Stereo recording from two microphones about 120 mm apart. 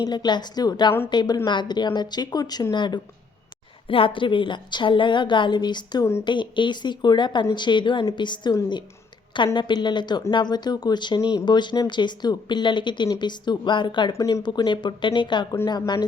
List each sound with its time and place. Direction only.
0.0 s a woman's voice: 35° left (ahead or behind)
9.6 s a woman's voice: 40° left (ahead or behind)
14.2 s a woman's voice: 30° left (ahead or behind)